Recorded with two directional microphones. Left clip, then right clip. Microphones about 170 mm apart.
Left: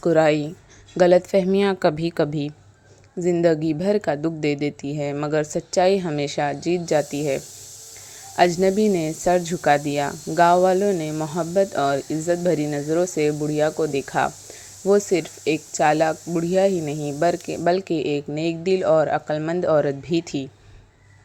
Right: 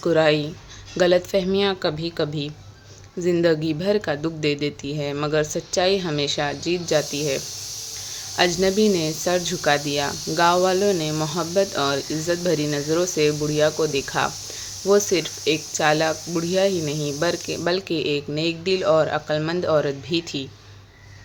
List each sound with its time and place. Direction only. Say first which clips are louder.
0.0 s speech: left 1 dB; 40° left (ahead or behind)